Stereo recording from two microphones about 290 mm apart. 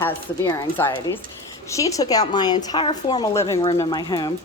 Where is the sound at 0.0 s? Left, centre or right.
Centre.